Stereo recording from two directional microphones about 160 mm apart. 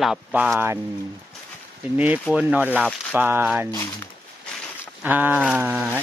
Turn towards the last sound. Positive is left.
turn(degrees=-10)  # may be behind; listen again after turning